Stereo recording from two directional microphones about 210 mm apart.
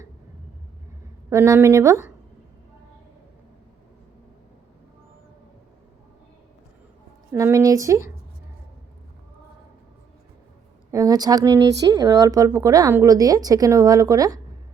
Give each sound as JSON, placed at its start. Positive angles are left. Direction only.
{"t": 1.3, "sound": "speech", "side_deg": -15}
{"t": 7.3, "sound": "speech", "side_deg": -15}
{"t": 10.9, "sound": "speech", "side_deg": -15}